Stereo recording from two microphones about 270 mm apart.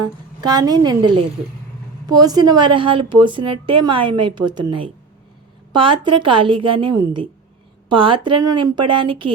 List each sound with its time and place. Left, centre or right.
0.4 s a woman's voice: centre